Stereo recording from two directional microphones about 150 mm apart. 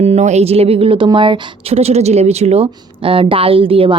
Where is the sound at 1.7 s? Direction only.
45° right (ahead or behind).